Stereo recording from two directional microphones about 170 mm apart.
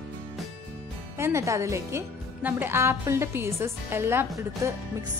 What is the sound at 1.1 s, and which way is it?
A woman's voice, 15° right (ahead or behind).